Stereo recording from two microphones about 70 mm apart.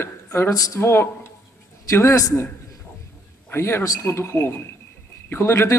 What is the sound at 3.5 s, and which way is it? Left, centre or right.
A man's voice, left.